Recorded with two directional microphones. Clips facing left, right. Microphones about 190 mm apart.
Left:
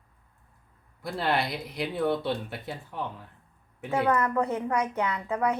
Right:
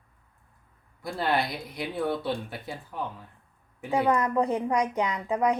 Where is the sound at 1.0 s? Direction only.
Centre (ahead or behind).